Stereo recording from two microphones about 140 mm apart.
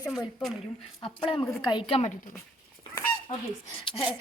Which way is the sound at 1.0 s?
35° left (ahead or behind).